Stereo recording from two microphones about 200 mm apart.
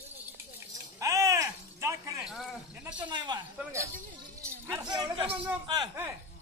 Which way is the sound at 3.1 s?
20° right (ahead or behind).